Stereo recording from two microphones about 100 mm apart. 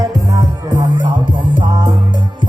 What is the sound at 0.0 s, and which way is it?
Music, 35° right (ahead or behind).